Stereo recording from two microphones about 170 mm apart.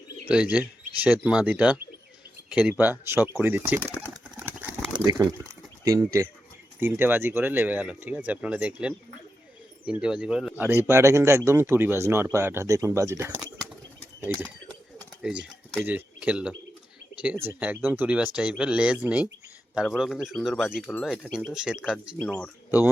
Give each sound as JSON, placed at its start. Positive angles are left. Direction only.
{"t": 0.5, "sound": "speech", "side_deg": -10}
{"t": 3.8, "sound": "a sound", "side_deg": -10}
{"t": 4.9, "sound": "speech", "side_deg": -20}
{"t": 22.2, "sound": "speech", "side_deg": 10}